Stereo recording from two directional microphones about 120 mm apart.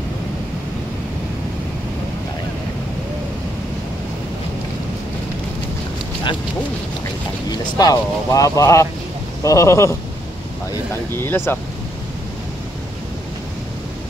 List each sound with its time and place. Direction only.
7.7 s speech: 30° left (ahead or behind)
11.1 s speech: 20° left (ahead or behind)